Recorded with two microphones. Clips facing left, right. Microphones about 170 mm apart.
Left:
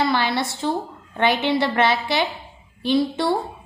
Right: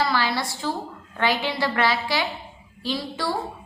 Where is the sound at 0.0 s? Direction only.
20° left (ahead or behind).